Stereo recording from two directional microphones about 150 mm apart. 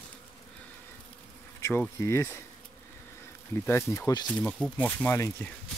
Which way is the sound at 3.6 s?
15° left (ahead or behind).